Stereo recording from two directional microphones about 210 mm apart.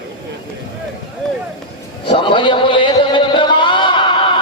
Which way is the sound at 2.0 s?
25° left (ahead or behind).